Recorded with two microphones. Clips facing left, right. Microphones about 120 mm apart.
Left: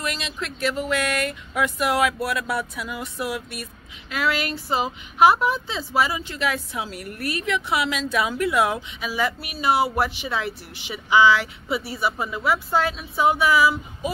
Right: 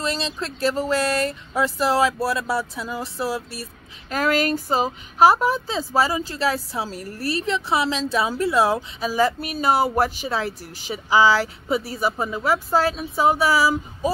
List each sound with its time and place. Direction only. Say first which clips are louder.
0.0 s speech: right 3 dB; 30° right (ahead or behind)
4.1 s speech: right 4 dB; 40° right (ahead or behind)